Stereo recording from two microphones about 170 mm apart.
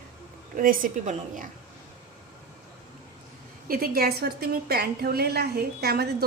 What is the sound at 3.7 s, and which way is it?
A woman's voice, 60° right (ahead or behind).